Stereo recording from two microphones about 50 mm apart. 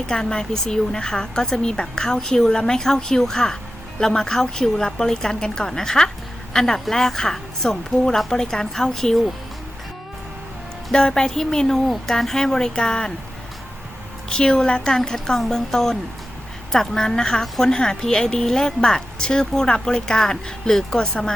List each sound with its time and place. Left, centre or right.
0.1 s a woman's voice: centre
10.9 s a woman's voice: centre
14.3 s a woman's voice: centre
14.9 s a woman's voice: centre